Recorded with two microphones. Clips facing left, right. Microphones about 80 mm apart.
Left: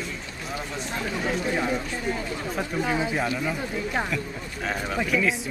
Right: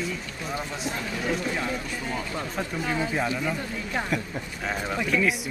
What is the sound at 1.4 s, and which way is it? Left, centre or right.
Speech, centre.